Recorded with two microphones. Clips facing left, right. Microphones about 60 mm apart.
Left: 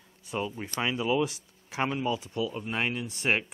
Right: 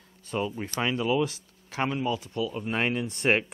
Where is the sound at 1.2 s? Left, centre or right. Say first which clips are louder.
Right 1 dB; left.